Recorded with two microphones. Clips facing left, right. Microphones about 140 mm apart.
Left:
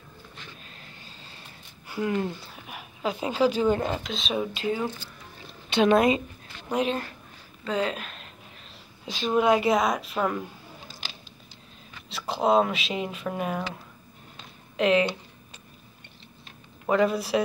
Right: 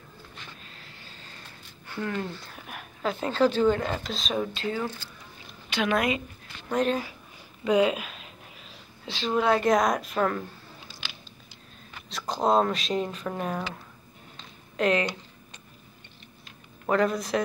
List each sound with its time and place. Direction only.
1.9 s speech: 10° left (ahead or behind)
2.4 s speech: 5° left (ahead or behind); by 6.2 s 25° left (ahead or behind)
6.7 s speech: 5° left (ahead or behind)
7.6 s speech: 10° right (ahead or behind)
9.0 s speech: 15° left (ahead or behind)
9.7 s speech: centre (ahead or behind)
12.1 s speech: 5° left (ahead or behind)
14.3 s a sound: 20° left (ahead or behind)
16.8 s speech: 5° left (ahead or behind)